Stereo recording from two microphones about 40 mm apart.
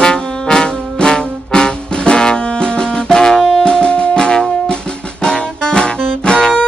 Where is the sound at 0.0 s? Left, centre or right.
Centre.